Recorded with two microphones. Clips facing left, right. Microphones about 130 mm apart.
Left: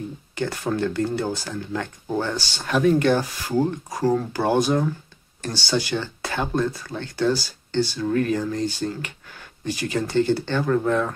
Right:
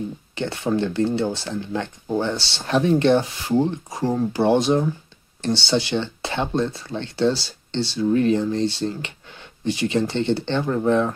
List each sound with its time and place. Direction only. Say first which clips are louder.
0.4 s speech: right 1 dB; 25° right (ahead or behind)